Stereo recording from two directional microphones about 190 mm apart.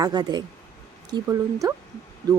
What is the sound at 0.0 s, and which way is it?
A woman's voice, 20° right (ahead or behind).